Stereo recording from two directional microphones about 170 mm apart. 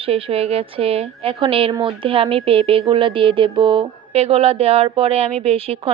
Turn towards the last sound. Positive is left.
turn(degrees=-35)  # may be behind; listen again after turning